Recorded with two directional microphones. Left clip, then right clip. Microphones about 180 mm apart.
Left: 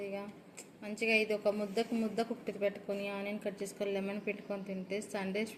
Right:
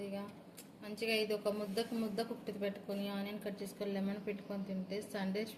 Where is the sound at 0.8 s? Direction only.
30° left (ahead or behind).